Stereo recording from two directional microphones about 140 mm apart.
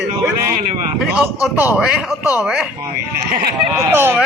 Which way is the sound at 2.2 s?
15° right (ahead or behind).